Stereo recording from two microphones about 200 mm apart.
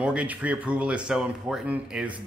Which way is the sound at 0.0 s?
5° right (ahead or behind).